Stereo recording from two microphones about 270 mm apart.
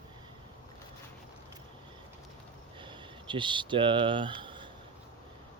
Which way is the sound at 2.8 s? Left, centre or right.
Centre.